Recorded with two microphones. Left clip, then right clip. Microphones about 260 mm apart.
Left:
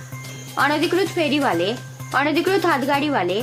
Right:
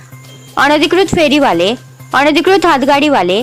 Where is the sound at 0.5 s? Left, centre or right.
Right.